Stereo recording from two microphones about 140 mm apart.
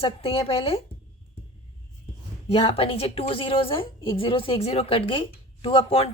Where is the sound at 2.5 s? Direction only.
45° left (ahead or behind).